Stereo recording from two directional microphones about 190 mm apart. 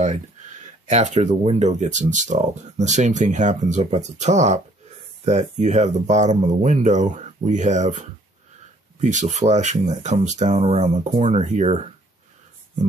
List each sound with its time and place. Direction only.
0.8 s speech: 40° right (ahead or behind)